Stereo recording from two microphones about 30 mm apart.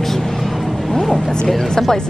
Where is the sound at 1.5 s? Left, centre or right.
Centre.